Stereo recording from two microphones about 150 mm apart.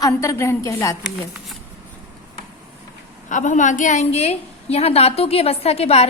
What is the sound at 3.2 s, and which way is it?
A woman's voice, 55° left (ahead or behind).